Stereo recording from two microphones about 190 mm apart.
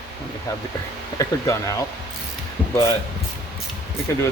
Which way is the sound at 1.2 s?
15° left (ahead or behind).